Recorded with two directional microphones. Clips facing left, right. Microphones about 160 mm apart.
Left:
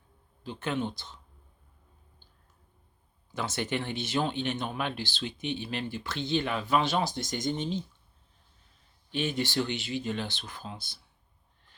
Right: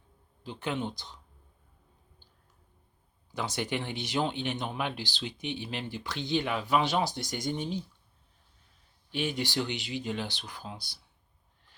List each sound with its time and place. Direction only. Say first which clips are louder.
0.4 s speech: left 2 dB; 15° right (ahead or behind)
3.3 s speech: left 1 dB; 15° right (ahead or behind)
9.1 s speech: left 2 dB; 15° right (ahead or behind)